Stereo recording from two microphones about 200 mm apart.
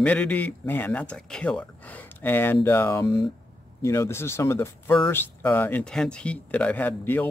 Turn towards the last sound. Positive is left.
turn(degrees=10)  # may be behind; listen again after turning